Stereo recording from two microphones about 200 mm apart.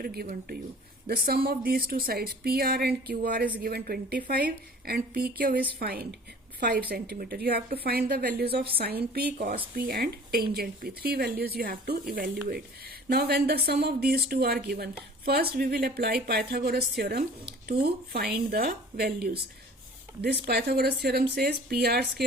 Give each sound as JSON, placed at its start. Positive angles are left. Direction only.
{"t": 0.0, "sound": "speech", "side_deg": -50}